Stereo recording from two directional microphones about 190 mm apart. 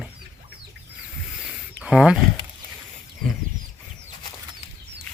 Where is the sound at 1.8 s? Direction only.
5° right (ahead or behind).